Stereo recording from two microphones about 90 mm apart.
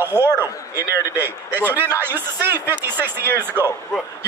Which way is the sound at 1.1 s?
25° right (ahead or behind).